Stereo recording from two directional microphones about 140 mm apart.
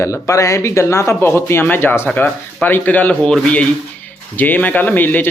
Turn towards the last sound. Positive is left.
turn(degrees=15)  # may be behind; listen again after turning